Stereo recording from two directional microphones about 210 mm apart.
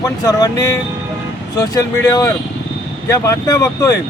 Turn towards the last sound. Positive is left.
turn(degrees=15)  # may be behind; listen again after turning